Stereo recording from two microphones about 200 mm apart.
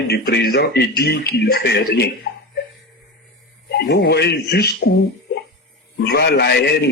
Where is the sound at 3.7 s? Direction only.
55° left (ahead or behind).